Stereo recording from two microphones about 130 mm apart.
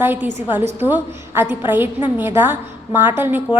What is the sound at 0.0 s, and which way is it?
A woman's voice, 15° right (ahead or behind).